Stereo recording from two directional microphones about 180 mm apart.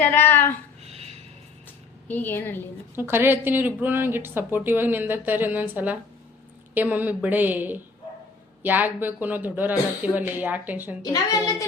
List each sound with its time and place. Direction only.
0.0 s speech: 10° left (ahead or behind)
0.9 s a sound: 35° right (ahead or behind)
2.0 s speech: 10° left (ahead or behind)
2.9 s speech: 10° right (ahead or behind)
11.0 s a child's voice: 20° left (ahead or behind)